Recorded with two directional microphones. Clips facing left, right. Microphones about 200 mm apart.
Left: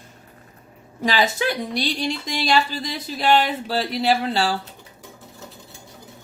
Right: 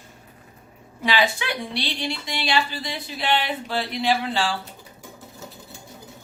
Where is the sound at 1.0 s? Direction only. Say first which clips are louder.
Left 2 dB; 45° left (ahead or behind).